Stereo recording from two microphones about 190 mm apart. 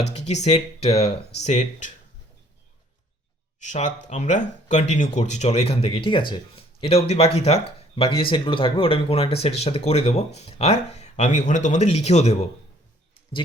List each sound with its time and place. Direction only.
0.1 s speech: 35° left (ahead or behind)
3.6 s speech: 40° left (ahead or behind)